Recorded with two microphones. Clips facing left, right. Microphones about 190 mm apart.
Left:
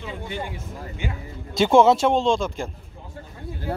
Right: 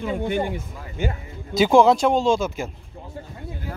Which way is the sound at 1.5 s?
Centre (ahead or behind).